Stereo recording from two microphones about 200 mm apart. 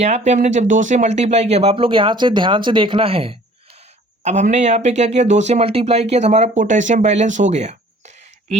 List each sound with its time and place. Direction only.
0.0 s speech: 35° right (ahead or behind)